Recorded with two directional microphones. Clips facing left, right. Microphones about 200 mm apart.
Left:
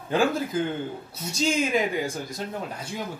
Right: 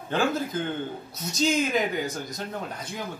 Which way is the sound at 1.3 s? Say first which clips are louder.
Even; 10° left (ahead or behind).